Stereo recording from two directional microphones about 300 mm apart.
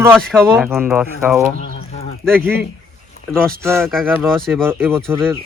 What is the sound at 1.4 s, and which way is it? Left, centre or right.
Bird, left.